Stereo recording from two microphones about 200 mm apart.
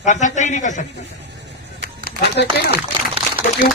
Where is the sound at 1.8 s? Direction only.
50° left (ahead or behind).